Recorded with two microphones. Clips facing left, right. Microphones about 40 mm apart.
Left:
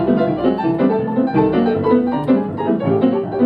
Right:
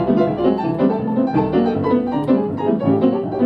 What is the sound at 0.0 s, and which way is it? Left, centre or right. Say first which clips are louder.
Music: left 1 dB; centre.